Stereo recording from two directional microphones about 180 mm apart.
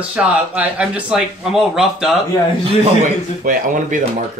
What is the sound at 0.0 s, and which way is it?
Speech, 5° right (ahead or behind).